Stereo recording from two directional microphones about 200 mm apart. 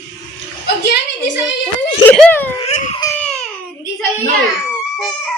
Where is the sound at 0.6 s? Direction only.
55° left (ahead or behind).